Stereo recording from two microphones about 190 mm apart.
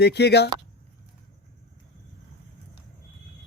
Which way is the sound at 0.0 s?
60° left (ahead or behind).